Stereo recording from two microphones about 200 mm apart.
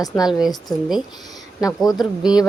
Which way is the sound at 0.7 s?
Centre (ahead or behind).